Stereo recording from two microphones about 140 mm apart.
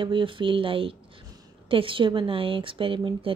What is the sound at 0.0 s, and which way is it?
Speech, 35° right (ahead or behind).